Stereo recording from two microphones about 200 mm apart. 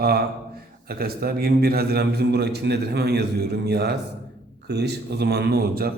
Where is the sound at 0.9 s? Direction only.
50° right (ahead or behind).